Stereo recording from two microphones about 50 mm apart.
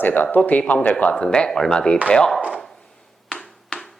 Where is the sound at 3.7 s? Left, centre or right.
Left.